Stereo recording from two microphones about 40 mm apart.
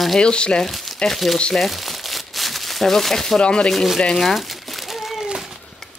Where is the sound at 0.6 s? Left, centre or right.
Centre.